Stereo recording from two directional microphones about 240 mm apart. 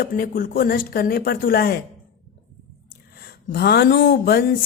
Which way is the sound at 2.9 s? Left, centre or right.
Left.